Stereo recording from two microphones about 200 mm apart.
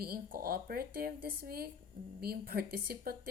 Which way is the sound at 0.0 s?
45° right (ahead or behind).